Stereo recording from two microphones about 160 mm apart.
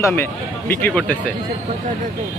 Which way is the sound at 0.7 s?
10° left (ahead or behind).